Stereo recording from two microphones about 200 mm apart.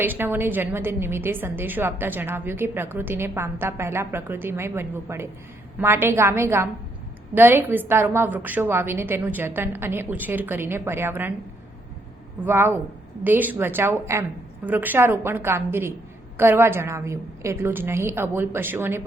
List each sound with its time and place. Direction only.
0.0 s a woman's voice: 10° right (ahead or behind)
12.4 s a woman's voice: 10° right (ahead or behind)